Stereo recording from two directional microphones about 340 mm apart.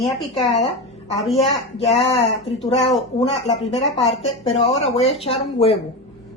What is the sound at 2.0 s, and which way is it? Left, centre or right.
Speech, centre.